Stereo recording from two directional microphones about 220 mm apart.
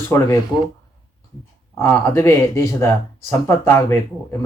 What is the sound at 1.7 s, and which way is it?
Speech, 10° left (ahead or behind).